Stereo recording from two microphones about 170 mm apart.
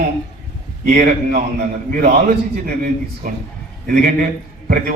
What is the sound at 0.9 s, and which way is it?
Speech, 55° right (ahead or behind).